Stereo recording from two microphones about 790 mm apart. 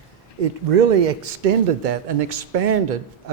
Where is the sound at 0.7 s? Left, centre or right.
Right.